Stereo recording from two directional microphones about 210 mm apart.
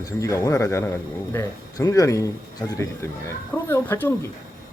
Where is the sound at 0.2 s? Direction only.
15° left (ahead or behind).